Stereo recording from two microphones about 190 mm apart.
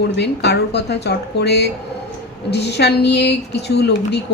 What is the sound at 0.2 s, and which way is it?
A woman's voice, 65° left (ahead or behind).